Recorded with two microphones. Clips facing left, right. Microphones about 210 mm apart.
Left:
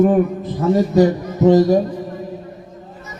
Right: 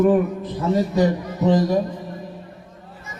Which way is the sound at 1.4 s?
45° left (ahead or behind).